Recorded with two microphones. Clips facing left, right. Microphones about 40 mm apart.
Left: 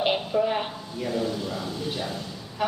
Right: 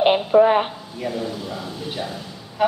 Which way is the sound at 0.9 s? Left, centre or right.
Centre.